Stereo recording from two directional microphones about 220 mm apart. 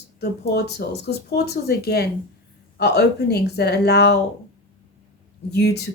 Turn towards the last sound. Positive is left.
turn(degrees=50)  # may be behind; listen again after turning